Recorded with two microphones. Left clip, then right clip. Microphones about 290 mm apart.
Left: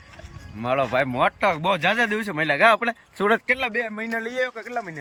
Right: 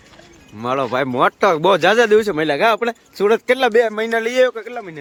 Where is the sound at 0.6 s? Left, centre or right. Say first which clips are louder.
Right 3 dB; centre.